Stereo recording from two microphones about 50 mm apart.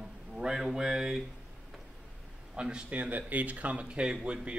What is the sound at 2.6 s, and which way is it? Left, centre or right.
Speech, centre.